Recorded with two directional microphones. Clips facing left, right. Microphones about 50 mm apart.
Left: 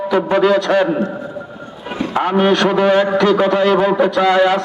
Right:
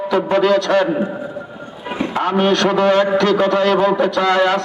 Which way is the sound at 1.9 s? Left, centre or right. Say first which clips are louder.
Even; centre.